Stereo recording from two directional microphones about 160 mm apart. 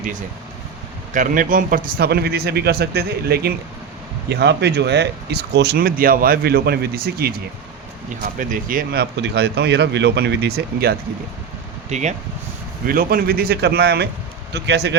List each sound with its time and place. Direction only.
1.1 s speech: 55° right (ahead or behind); by 3.5 s 80° right
4.3 s speech: 90° right; by 7.3 s 75° right (ahead or behind)
8.4 s speech: 60° right (ahead or behind); by 10.9 s 75° right (ahead or behind)
11.9 s speech: 45° right (ahead or behind)
12.8 s speech: 65° right (ahead or behind); by 14.9 s 90° right